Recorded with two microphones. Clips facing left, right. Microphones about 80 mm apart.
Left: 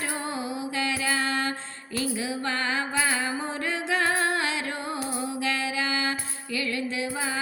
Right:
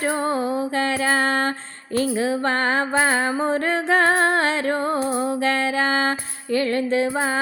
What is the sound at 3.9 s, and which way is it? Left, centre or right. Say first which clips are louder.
Humming: right 7 dB; right.